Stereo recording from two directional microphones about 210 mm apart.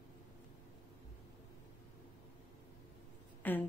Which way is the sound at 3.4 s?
10° left (ahead or behind).